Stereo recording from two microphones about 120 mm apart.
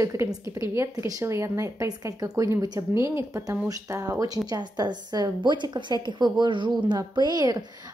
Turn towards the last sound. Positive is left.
turn(degrees=-35)  # may be behind; listen again after turning